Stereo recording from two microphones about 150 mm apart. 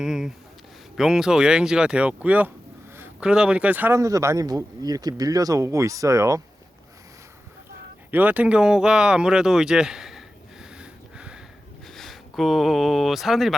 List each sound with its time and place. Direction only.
0.0 s a man's voice: 5° right (ahead or behind); by 6.4 s 20° right (ahead or behind)
8.1 s a sound: 10° right (ahead or behind)
11.9 s speech: centre (ahead or behind)